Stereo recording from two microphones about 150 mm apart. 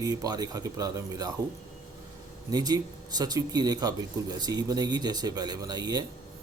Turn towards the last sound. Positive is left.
turn(degrees=-25)  # may be behind; listen again after turning